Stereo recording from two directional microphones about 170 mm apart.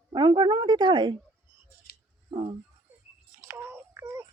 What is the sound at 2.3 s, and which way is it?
Speech, 35° right (ahead or behind).